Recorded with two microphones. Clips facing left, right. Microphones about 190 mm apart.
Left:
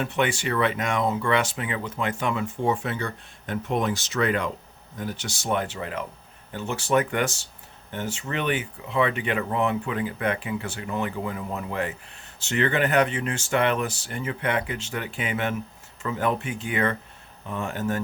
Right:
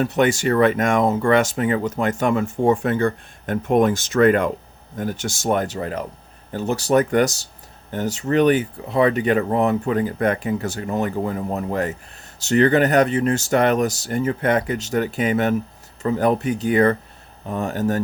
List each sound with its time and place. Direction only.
0.0 s speech: 40° right (ahead or behind)